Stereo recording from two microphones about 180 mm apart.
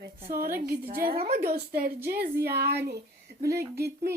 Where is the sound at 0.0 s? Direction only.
55° right (ahead or behind).